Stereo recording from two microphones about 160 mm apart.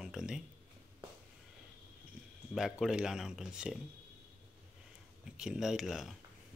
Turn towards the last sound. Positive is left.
turn(degrees=0)  # may be behind; listen again after turning